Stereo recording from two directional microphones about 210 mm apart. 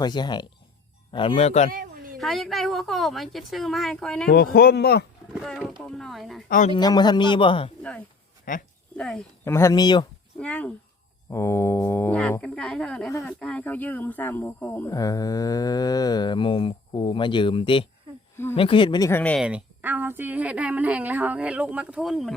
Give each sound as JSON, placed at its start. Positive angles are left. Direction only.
{"t": 0.0, "sound": "speech", "side_deg": 20}
{"t": 2.1, "sound": "a woman's voice", "side_deg": 0}
{"t": 4.3, "sound": "speech", "side_deg": 45}
{"t": 5.3, "sound": "a woman's voice", "side_deg": 0}
{"t": 6.7, "sound": "speech", "side_deg": 20}
{"t": 7.8, "sound": "speech", "side_deg": 5}
{"t": 8.5, "sound": "speech", "side_deg": 40}
{"t": 9.0, "sound": "speech", "side_deg": 5}
{"t": 10.3, "sound": "a woman's voice", "side_deg": 5}
{"t": 19.5, "sound": "speech", "side_deg": -5}